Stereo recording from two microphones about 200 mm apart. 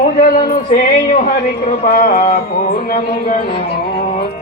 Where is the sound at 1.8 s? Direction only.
45° left (ahead or behind).